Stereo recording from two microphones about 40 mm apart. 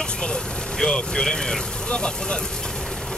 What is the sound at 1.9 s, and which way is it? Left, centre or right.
Speech, centre.